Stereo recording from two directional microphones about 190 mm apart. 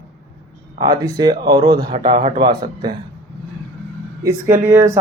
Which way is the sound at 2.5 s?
55° right (ahead or behind).